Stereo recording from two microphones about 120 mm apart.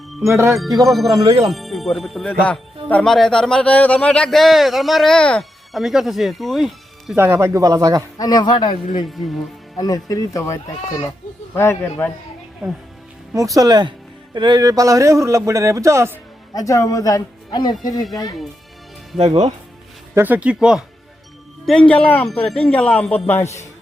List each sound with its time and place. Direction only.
0.2 s speech: 25° right (ahead or behind)
0.5 s speech: centre (ahead or behind)
7.2 s speech: 20° right (ahead or behind)
8.2 s speech: 35° left (ahead or behind)
9.0 s speech: centre (ahead or behind)
9.7 s speech: 30° left (ahead or behind)
12.6 s speech: centre (ahead or behind)
13.3 s speech: 30° right (ahead or behind)
16.6 s speech: 30° left (ahead or behind)
19.1 s speech: 60° right (ahead or behind)
20.1 s speech: 15° right (ahead or behind)
21.7 s speech: 10° left (ahead or behind)
23.2 s speech: 15° left (ahead or behind)